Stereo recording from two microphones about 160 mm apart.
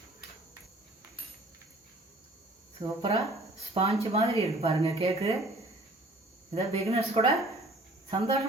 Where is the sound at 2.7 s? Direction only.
30° right (ahead or behind).